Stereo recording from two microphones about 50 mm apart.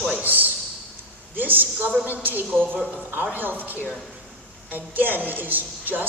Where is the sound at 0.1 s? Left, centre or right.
Right.